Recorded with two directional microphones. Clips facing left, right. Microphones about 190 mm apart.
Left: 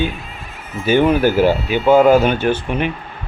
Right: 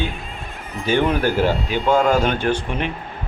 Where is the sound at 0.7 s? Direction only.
5° left (ahead or behind).